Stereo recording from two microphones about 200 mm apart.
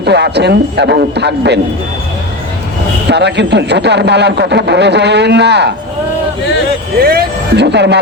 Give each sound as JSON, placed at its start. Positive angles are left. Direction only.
{"t": 0.0, "sound": "speech", "side_deg": -55}
{"t": 3.1, "sound": "speech", "side_deg": -60}
{"t": 7.0, "sound": "speech", "side_deg": -50}